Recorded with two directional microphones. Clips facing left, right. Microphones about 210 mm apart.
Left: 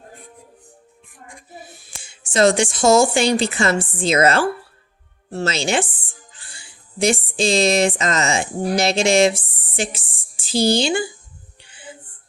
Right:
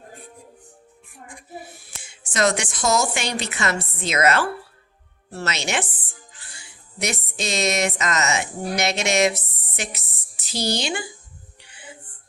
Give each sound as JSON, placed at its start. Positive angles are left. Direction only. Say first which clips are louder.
{"t": 2.0, "sound": "a woman's voice", "louder": "left 6 dB", "side_deg": 30}